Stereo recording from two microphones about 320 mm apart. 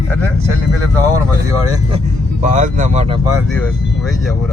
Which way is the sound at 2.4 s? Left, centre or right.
Right.